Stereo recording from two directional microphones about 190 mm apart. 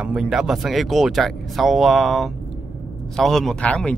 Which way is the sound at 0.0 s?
5° right (ahead or behind).